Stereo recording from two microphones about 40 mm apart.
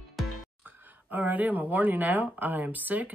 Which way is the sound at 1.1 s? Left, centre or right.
Right.